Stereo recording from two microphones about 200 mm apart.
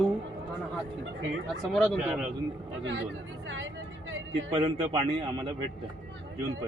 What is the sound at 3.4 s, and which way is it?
Vehicle, 70° right (ahead or behind).